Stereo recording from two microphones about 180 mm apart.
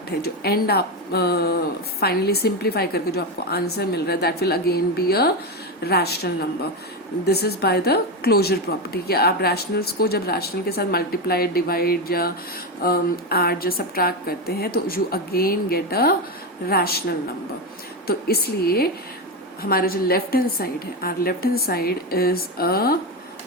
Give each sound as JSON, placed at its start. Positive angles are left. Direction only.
{"t": 0.2, "sound": "a woman's voice", "side_deg": 60}